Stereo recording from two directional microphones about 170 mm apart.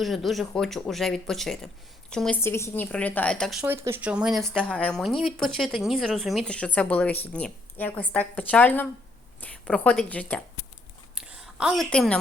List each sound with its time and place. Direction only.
0.0 s speech: centre (ahead or behind)
2.4 s a woman's voice: 15° left (ahead or behind)
11.1 s a sound: 5° right (ahead or behind)
11.9 s speech: 5° left (ahead or behind)